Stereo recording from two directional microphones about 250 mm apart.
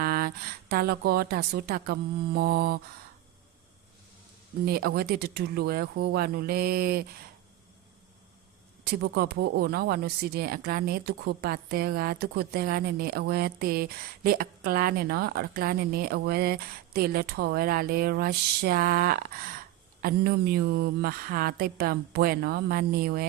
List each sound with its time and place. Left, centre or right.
0.0 s speech: right
4.6 s speech: right
8.8 s speech: right